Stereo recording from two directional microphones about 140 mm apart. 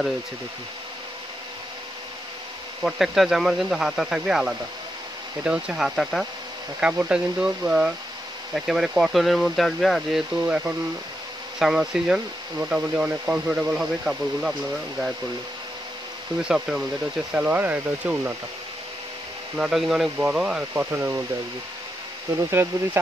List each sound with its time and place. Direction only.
2.8 s speech: centre (ahead or behind)
16.3 s speech: 5° right (ahead or behind)
19.5 s speech: 5° right (ahead or behind)
22.3 s speech: 20° right (ahead or behind)